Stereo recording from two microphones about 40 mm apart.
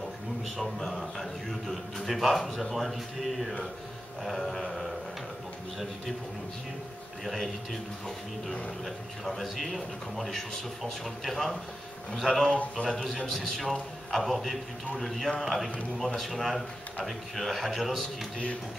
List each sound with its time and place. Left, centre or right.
0.6 s a man's voice: centre
7.2 s a man's voice: centre
8.8 s a man's voice: centre
12.8 s a man's voice: left
13.3 s a man's voice: centre